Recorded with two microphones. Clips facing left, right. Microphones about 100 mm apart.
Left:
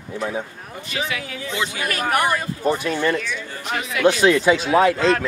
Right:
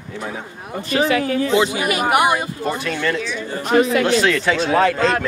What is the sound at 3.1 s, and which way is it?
Speech, 15° right (ahead or behind).